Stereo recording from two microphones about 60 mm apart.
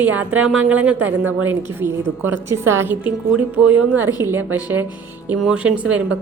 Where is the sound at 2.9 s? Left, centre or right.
Right.